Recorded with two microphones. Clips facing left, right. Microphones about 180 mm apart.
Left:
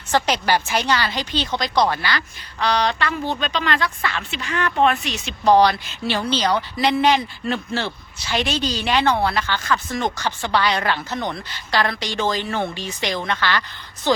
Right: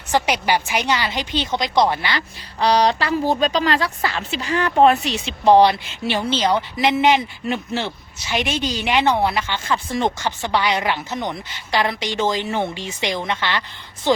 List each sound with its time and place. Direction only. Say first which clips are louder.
0.1 s a woman's voice: even; 15° right (ahead or behind); by 5.2 s 35° right (ahead or behind)
5.2 s speech: right 2 dB; 25° right (ahead or behind)